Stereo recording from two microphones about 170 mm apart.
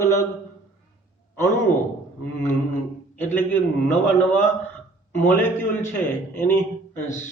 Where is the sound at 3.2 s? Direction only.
10° left (ahead or behind).